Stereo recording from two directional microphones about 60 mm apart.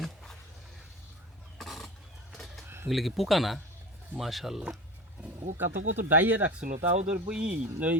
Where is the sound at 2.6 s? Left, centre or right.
Right.